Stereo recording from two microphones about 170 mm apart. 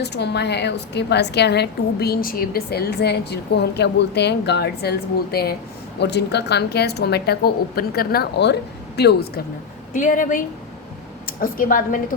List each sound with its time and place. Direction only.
0.0 s a woman's voice: 75° left (ahead or behind)
6.0 s a woman's voice: 80° left
9.9 s a woman's voice: 50° left (ahead or behind)